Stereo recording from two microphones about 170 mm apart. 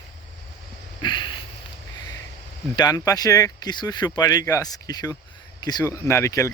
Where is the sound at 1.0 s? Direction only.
25° left (ahead or behind).